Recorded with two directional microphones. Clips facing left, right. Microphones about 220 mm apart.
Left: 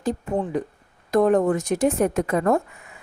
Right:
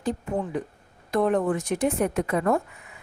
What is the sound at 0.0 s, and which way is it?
A woman's voice, 45° left (ahead or behind).